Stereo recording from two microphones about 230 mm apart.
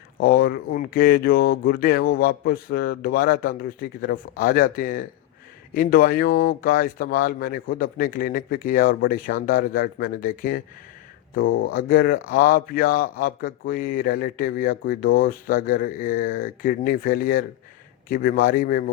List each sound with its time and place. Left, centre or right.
0.2 s speech: left